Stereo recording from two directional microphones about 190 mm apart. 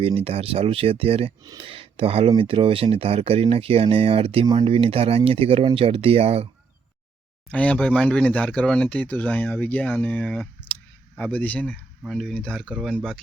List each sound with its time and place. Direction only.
0.0 s speech: 30° right (ahead or behind)
7.5 s speech: 5° left (ahead or behind)